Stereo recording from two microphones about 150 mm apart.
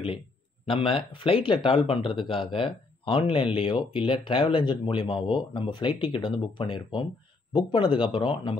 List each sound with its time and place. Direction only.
0.7 s speech: 40° left (ahead or behind)